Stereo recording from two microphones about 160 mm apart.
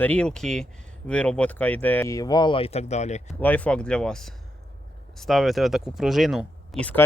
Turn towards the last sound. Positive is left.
turn(degrees=5)  # may be behind; listen again after turning